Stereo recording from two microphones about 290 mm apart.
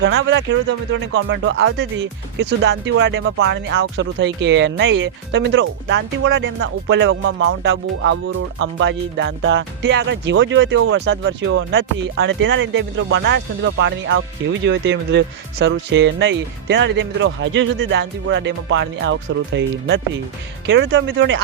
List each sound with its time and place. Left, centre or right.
0.0 s speech: right